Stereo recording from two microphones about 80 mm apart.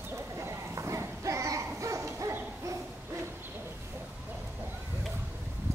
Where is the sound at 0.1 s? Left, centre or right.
Right.